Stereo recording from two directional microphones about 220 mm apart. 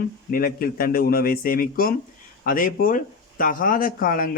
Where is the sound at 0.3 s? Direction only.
40° left (ahead or behind).